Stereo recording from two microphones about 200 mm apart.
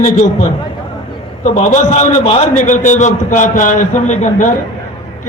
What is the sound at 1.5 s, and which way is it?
A man's voice, 35° left (ahead or behind).